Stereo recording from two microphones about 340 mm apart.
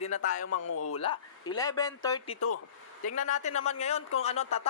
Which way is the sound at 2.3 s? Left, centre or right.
Left.